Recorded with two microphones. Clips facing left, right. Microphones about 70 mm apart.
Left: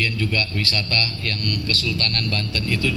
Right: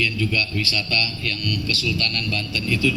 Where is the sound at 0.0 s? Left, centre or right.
Left.